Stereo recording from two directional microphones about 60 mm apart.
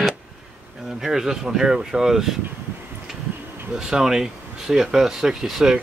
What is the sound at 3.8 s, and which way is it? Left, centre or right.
Speech, centre.